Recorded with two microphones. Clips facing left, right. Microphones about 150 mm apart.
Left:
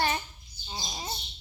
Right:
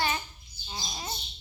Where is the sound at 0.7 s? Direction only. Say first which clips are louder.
Left 1 dB; 20° left (ahead or behind).